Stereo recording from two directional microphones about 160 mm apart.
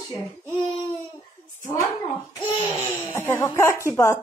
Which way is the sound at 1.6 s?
15° left (ahead or behind).